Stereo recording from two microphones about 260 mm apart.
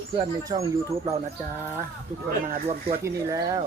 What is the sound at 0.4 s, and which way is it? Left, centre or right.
Speech, centre.